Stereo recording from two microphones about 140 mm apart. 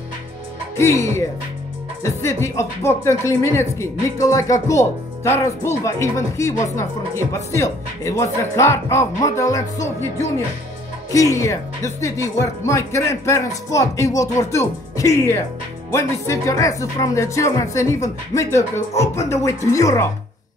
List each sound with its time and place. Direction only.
0.7 s speech: 20° left (ahead or behind)
11.1 s speech: 25° left (ahead or behind)